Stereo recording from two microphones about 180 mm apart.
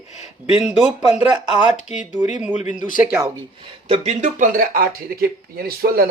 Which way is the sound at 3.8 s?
35° right (ahead or behind).